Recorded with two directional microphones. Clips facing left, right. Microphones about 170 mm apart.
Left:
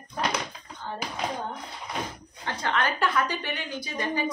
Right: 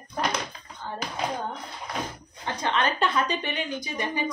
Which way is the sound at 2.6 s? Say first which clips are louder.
Right 1 dB; 20° right (ahead or behind).